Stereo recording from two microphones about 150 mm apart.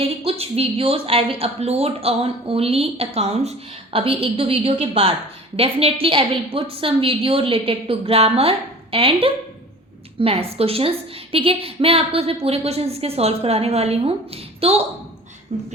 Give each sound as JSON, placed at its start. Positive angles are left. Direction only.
{"t": 0.0, "sound": "speech", "side_deg": -40}